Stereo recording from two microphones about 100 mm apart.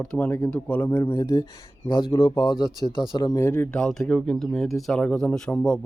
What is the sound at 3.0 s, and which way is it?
Speech, 55° left (ahead or behind).